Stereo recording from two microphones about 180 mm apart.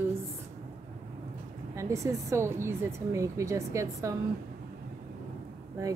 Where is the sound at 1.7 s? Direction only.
15° right (ahead or behind).